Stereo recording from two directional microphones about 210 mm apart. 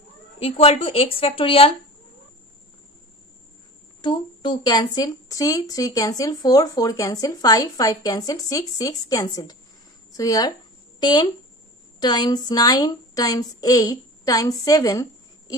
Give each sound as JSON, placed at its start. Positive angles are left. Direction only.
{"t": 0.4, "sound": "speech", "side_deg": 30}
{"t": 4.0, "sound": "speech", "side_deg": 20}
{"t": 14.6, "sound": "a sound", "side_deg": 15}